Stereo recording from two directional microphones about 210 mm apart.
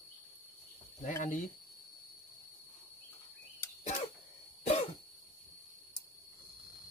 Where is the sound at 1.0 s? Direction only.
40° left (ahead or behind).